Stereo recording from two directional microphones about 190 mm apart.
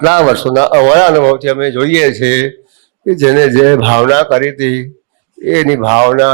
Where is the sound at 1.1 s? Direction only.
35° left (ahead or behind).